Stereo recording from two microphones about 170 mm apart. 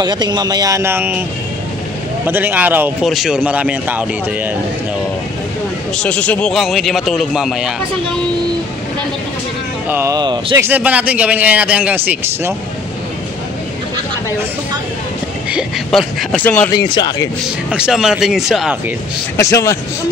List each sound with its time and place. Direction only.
0.0 s speech: 25° right (ahead or behind)
2.2 s a man's voice: 10° right (ahead or behind)
5.9 s a man's voice: 5° left (ahead or behind)
9.8 s speech: 15° right (ahead or behind)
10.1 s speech: 25° right (ahead or behind)
10.7 s a man's voice: 10° right (ahead or behind)
15.5 s a man's voice: centre (ahead or behind)
16.7 s speech: 25° left (ahead or behind)
17.6 s a man's voice: 5° right (ahead or behind)
19.3 s a man's voice: 15° left (ahead or behind)